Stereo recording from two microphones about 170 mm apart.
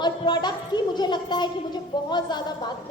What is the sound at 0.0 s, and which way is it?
A woman's voice, 25° left (ahead or behind).